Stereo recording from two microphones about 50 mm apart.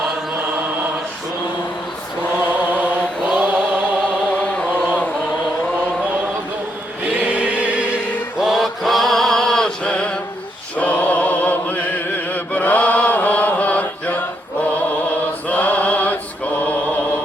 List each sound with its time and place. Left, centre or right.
2.5 s chant: right
3.2 s mantra: right
4.3 s chant: left
7.0 s choir: right
8.4 s male singing: centre
9.8 s a sound: left
10.8 s chant: left
15.4 s chant: left
16.6 s mantra: left